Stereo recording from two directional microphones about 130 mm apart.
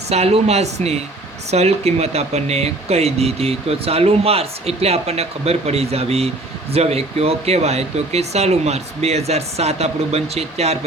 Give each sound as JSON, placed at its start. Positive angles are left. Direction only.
{"t": 0.1, "sound": "speech", "side_deg": -55}